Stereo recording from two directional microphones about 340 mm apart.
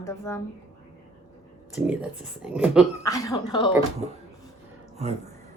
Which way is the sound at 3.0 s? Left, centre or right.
Centre.